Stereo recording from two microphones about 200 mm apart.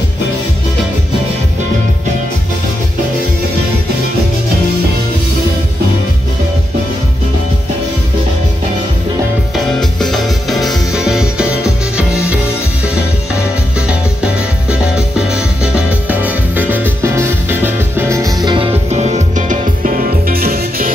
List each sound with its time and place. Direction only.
9.8 s music: centre (ahead or behind)
14.7 s music: 5° right (ahead or behind); by 20.9 s 45° right (ahead or behind)